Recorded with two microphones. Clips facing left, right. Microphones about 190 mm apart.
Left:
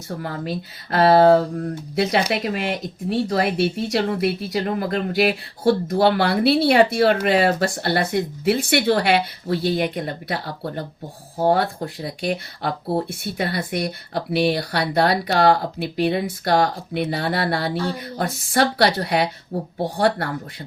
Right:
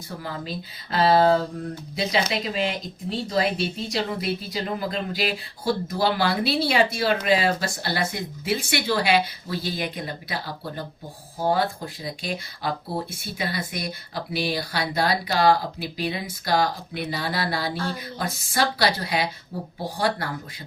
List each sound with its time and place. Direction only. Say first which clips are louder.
0.2 s speech: left 4 dB; 60° left (ahead or behind)